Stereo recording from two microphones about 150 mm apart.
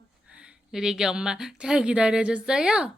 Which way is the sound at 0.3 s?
5° right (ahead or behind).